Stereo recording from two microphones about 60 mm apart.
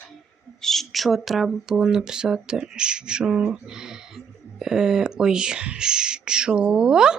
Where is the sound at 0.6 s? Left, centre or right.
Centre.